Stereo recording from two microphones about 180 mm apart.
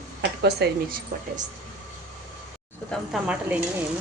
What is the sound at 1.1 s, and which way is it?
Speech, 50° right (ahead or behind).